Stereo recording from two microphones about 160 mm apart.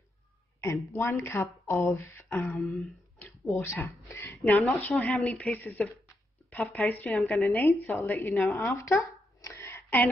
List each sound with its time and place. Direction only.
0.6 s a woman's voice: 20° left (ahead or behind); by 7.5 s centre (ahead or behind)
7.5 s speech: 15° left (ahead or behind)
8.5 s a sound: 15° left (ahead or behind)